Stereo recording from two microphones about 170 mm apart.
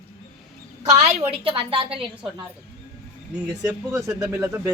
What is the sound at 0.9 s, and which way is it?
A woman's voice, 40° right (ahead or behind).